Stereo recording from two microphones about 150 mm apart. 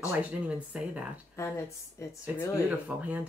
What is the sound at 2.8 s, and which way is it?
Speech, 10° right (ahead or behind).